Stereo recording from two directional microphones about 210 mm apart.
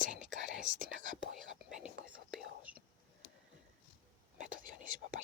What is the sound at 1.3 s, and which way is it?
Whispering, centre (ahead or behind).